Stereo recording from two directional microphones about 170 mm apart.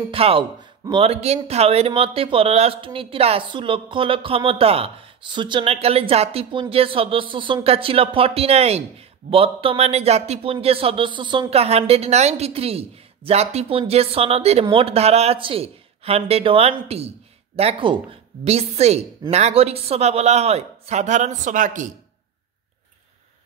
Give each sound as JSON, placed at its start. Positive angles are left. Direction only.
{"t": 0.1, "sound": "speech", "side_deg": -35}